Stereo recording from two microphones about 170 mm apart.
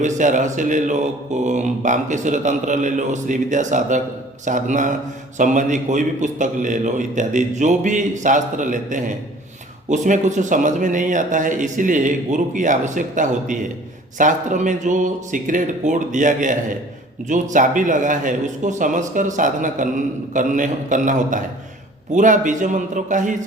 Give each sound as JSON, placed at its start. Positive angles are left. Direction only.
{"t": 0.0, "sound": "speech", "side_deg": -45}